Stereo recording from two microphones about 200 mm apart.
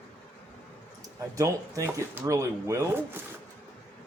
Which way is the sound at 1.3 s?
15° right (ahead or behind).